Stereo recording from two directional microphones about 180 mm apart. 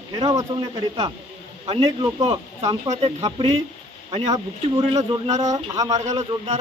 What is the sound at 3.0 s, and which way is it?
Speech, 35° right (ahead or behind).